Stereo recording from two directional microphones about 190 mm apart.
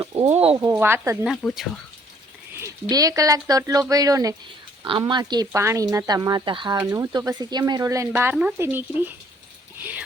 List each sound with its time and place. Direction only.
0.0 s speech: 30° right (ahead or behind)
0.6 s speech: 10° right (ahead or behind)
1.3 s speech: 5° left (ahead or behind)
2.9 s speech: 20° right (ahead or behind)